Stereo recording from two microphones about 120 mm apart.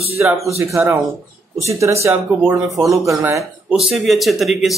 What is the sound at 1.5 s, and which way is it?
Speech, 25° right (ahead or behind).